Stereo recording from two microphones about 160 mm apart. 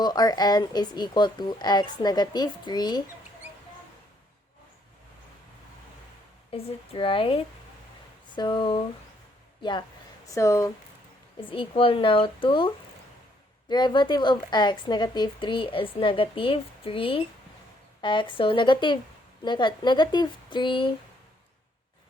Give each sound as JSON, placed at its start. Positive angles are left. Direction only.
{"t": 0.0, "sound": "speech", "side_deg": 25}
{"t": 6.5, "sound": "speech", "side_deg": 35}
{"t": 11.3, "sound": "speech", "side_deg": 35}